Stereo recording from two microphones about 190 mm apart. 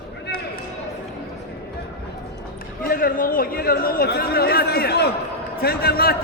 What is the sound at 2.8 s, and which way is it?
A man's voice, 50° left (ahead or behind).